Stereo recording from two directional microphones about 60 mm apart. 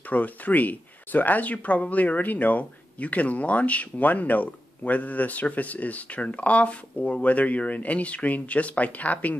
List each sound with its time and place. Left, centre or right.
0.1 s speech: left